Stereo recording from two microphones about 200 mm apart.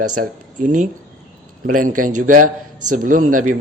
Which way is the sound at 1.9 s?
90° right.